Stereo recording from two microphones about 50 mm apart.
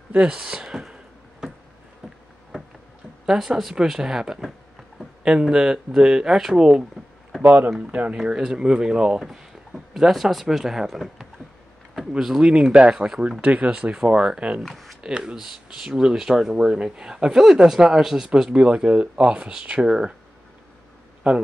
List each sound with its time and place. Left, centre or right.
0.1 s speech: centre
3.3 s speech: centre
7.4 s speech: right
7.8 s speech: right
8.2 s speech: centre
13.4 s speech: right
14.6 s speech: centre
15.0 s speech: centre
21.2 s speech: right